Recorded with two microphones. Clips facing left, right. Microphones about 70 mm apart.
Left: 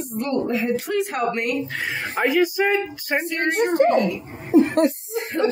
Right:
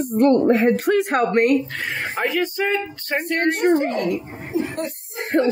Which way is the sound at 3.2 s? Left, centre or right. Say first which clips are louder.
Right 3 dB; right.